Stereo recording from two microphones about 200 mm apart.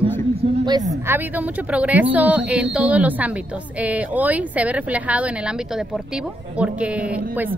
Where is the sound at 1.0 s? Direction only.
10° right (ahead or behind).